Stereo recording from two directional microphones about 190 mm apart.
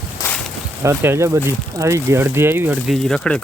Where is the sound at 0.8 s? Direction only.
15° right (ahead or behind).